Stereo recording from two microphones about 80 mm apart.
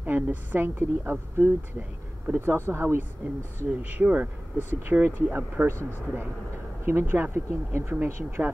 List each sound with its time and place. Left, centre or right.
0.0 s a woman's voice: right
6.9 s a woman's voice: right